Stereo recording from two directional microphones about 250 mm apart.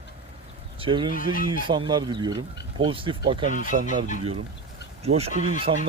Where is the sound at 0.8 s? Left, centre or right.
Centre.